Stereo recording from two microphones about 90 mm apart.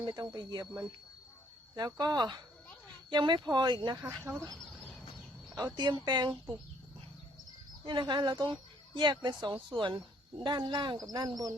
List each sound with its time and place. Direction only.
0.0 s speech: 45° right (ahead or behind)
1.7 s speech: 50° right (ahead or behind)
4.3 s speech: 40° right (ahead or behind)
5.5 s speech: 50° right (ahead or behind)
7.9 s speech: 60° right (ahead or behind)